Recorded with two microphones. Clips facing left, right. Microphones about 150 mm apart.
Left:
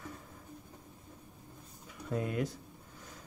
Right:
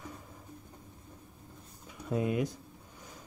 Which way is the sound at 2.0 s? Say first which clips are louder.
Right 3 dB; 15° right (ahead or behind).